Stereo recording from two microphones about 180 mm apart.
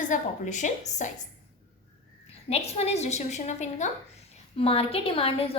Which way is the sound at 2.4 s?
35° left (ahead or behind).